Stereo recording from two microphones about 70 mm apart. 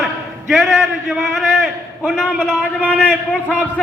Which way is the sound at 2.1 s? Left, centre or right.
Centre.